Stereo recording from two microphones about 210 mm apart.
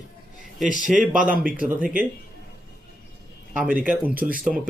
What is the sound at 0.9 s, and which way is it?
Speech, centre (ahead or behind).